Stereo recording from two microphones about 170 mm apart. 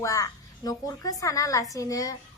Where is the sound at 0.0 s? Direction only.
20° left (ahead or behind).